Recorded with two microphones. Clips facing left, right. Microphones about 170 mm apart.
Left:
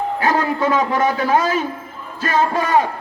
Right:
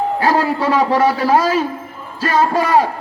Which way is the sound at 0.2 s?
35° right (ahead or behind).